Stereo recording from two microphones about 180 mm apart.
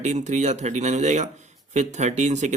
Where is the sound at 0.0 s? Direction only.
40° right (ahead or behind).